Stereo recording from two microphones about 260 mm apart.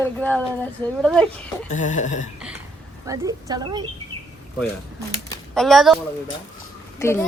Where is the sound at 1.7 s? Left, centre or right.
Left.